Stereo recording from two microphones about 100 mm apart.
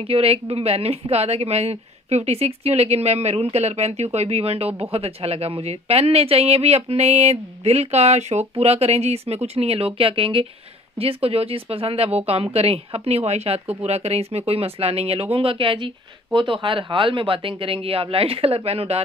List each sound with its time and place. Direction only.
0.0 s speech: 75° right (ahead or behind); by 15.2 s 90° right
15.3 s speech: 65° right (ahead or behind); by 18.9 s 85° right